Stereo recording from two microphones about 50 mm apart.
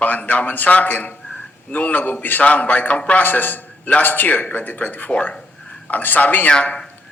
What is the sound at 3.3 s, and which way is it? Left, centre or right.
A man's voice, left.